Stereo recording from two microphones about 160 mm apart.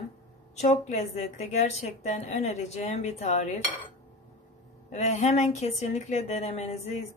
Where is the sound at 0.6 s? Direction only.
45° left (ahead or behind).